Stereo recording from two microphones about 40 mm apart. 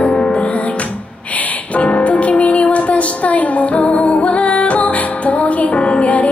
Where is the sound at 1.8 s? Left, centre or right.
Left.